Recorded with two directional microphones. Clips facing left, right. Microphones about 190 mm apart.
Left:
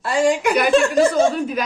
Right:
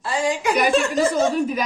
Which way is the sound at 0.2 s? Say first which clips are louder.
Left 5 dB; 50° left (ahead or behind).